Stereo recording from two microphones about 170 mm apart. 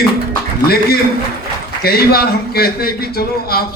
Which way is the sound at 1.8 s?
65° left (ahead or behind).